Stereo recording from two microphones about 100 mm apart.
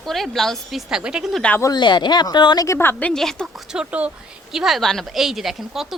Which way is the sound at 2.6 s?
25° left (ahead or behind).